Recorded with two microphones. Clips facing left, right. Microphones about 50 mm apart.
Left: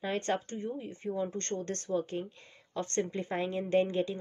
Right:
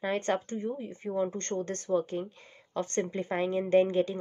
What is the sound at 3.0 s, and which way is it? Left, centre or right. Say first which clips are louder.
A woman's voice: right 2 dB; right.